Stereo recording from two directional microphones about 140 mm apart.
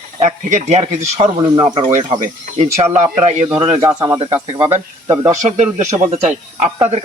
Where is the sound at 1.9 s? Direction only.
45° right (ahead or behind).